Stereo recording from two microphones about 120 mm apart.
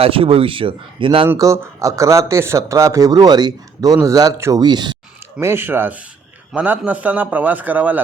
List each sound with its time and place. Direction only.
0.0 s speech: 50° right (ahead or behind)
1.4 s speech: 30° right (ahead or behind)
4.6 s speech: 35° right (ahead or behind)
5.4 s a man's voice: 20° right (ahead or behind)